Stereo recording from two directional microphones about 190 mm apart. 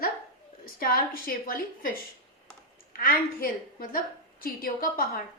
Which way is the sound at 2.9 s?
50° left (ahead or behind).